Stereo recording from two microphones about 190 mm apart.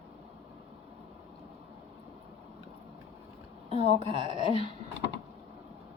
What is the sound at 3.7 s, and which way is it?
Speech, 30° right (ahead or behind).